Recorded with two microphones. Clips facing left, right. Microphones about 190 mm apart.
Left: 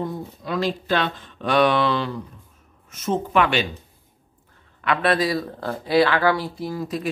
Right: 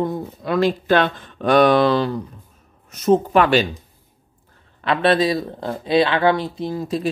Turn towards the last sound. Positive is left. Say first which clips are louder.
# right 4 dB
turn(degrees=-25)  # may be behind; listen again after turning